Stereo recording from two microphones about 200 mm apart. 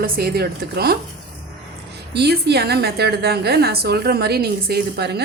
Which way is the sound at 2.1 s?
55° right (ahead or behind).